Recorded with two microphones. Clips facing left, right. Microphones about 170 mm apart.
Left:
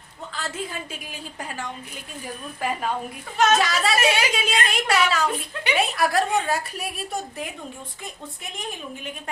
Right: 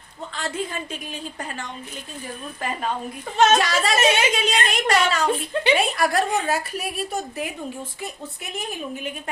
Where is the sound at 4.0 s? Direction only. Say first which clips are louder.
Right 5 dB; 25° right (ahead or behind).